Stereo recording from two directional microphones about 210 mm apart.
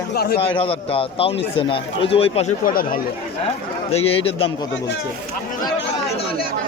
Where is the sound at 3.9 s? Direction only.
30° left (ahead or behind).